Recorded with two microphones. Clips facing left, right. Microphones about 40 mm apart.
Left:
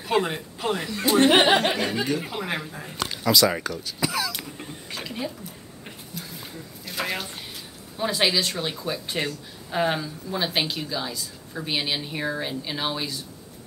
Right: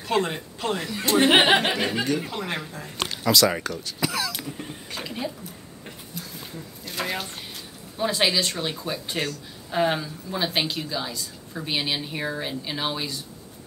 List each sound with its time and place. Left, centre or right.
0.0 s speech: centre
1.3 s speech: centre
1.8 s speech: centre
2.0 s speech: centre
6.1 s a sound: centre
8.0 s speech: centre